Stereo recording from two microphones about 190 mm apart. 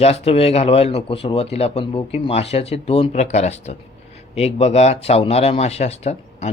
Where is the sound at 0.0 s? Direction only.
30° left (ahead or behind).